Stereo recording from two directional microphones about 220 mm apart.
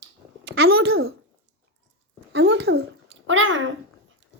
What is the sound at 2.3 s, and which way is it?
Speech, 50° right (ahead or behind).